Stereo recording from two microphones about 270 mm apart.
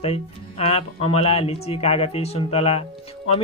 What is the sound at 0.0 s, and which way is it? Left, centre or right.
Speech, left.